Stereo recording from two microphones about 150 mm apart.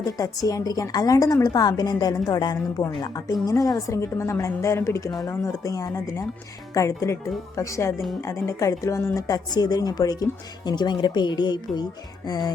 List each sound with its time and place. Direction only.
0.2 s a woman's voice: 25° left (ahead or behind)